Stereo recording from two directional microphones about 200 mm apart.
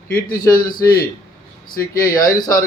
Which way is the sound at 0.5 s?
15° left (ahead or behind).